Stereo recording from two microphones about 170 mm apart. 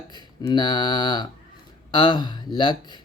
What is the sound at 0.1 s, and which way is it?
Speech, 25° left (ahead or behind).